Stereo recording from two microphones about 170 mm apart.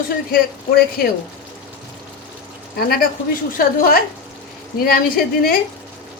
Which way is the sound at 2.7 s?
65° left (ahead or behind).